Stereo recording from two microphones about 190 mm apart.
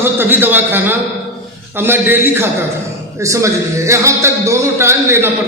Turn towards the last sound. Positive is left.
turn(degrees=-10)  # may be behind; listen again after turning